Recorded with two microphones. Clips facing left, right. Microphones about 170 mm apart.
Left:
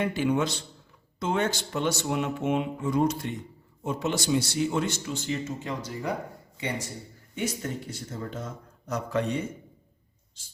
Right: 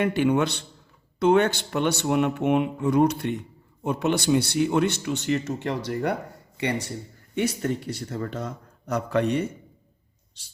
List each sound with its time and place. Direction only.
0.0 s speech: 60° right (ahead or behind)